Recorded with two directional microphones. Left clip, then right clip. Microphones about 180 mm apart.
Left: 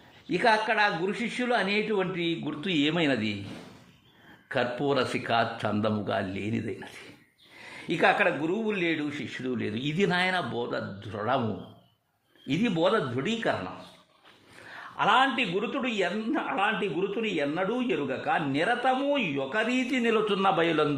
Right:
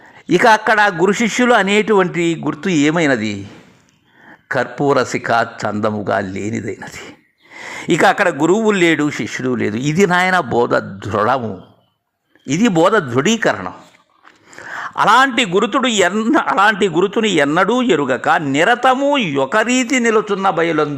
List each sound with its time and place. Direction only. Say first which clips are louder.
0.3 s a man's voice: right 13 dB; 45° right (ahead or behind); by 3.2 s 30° right (ahead or behind)
4.5 s a man's voice: right 11 dB; 35° right (ahead or behind)
7.6 s a man's voice: right 12 dB; 45° right (ahead or behind)
12.5 s a man's voice: right 12 dB; 45° right (ahead or behind)
14.7 s a man's voice: right 12 dB; 45° right (ahead or behind); by 20.8 s 25° right (ahead or behind)